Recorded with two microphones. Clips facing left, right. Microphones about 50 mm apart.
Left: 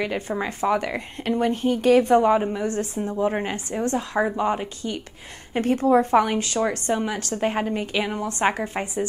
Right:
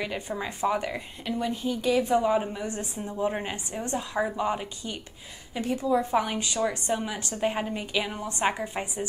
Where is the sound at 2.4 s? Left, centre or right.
Left.